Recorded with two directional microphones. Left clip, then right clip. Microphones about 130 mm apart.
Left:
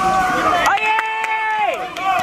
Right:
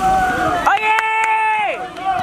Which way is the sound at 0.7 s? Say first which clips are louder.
Right 1 dB; 45° right (ahead or behind).